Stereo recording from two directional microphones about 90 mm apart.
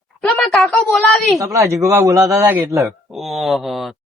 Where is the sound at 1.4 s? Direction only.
35° right (ahead or behind).